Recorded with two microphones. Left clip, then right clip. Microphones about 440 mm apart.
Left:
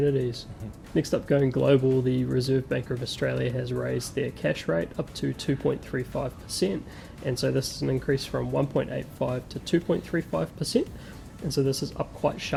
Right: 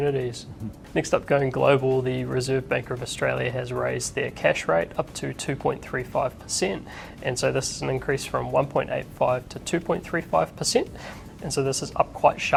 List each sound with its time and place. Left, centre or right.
0.0 s speech: right